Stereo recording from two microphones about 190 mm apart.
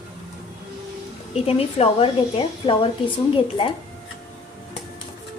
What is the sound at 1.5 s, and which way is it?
A woman's voice, 30° left (ahead or behind).